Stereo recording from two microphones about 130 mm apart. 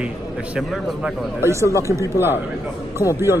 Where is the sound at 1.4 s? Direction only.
20° right (ahead or behind).